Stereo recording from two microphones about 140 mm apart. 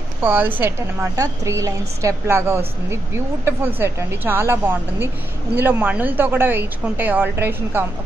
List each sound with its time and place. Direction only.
0.2 s a woman's voice: 15° right (ahead or behind)